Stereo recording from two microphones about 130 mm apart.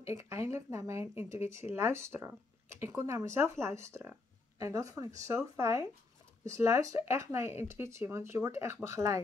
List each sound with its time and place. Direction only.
0.0 s speech: 25° right (ahead or behind)